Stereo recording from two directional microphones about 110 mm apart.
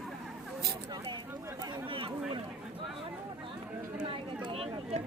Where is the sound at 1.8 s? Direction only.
55° right (ahead or behind).